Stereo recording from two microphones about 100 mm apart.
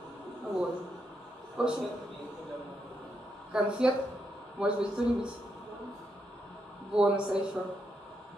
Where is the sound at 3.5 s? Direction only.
10° right (ahead or behind).